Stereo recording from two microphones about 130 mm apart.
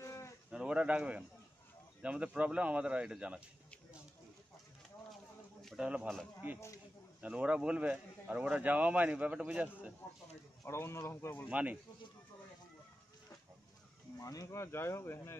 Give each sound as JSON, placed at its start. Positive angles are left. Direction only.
{"t": 0.0, "sound": "livestock", "side_deg": 20}
{"t": 0.5, "sound": "a sound", "side_deg": -5}
{"t": 2.0, "sound": "speech", "side_deg": -10}
{"t": 5.6, "sound": "a sound", "side_deg": 0}
{"t": 7.2, "sound": "speech", "side_deg": -10}
{"t": 10.6, "sound": "speech", "side_deg": 20}
{"t": 11.4, "sound": "speech", "side_deg": -10}
{"t": 14.2, "sound": "speech", "side_deg": 25}